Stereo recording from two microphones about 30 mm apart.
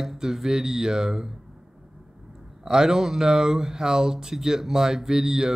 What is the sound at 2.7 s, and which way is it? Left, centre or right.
Speech, centre.